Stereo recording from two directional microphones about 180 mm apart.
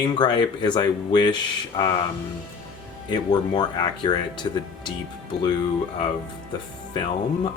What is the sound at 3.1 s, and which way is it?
Speech, 25° left (ahead or behind).